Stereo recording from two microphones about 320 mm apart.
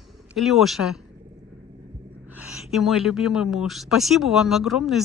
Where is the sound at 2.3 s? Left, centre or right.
Centre.